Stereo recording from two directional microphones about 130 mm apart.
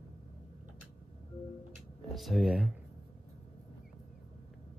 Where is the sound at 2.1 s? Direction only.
Centre (ahead or behind).